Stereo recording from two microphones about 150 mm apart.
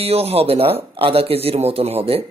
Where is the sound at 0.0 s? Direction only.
40° right (ahead or behind).